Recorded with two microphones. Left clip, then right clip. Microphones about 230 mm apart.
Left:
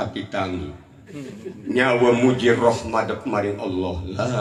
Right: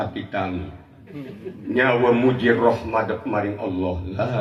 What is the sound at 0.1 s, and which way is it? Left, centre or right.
Speech, left.